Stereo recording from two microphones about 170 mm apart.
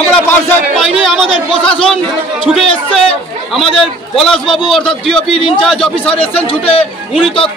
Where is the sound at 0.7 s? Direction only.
Centre (ahead or behind).